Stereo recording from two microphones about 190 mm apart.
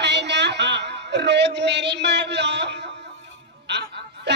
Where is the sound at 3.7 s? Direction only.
65° right (ahead or behind).